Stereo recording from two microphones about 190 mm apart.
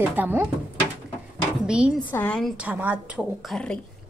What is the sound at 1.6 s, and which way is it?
Speech, 5° right (ahead or behind).